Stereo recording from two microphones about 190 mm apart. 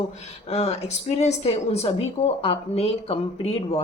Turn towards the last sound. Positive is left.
turn(degrees=30)  # may be behind; listen again after turning